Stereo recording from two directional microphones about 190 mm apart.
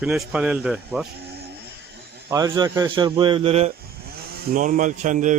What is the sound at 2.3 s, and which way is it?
Speech, 15° right (ahead or behind).